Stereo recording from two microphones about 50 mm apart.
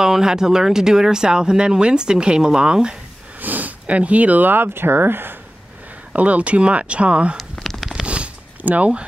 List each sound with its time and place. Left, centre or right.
0.0 s speech: centre
3.3 s speech: right
6.1 s speech: right
7.6 s a sound: centre
8.1 s zipper: right